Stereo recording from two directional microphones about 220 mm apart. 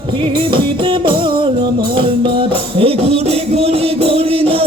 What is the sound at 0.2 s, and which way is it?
Music, 20° right (ahead or behind).